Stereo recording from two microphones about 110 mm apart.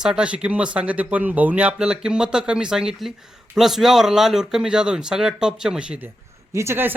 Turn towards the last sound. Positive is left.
turn(degrees=-20)  # may be behind; listen again after turning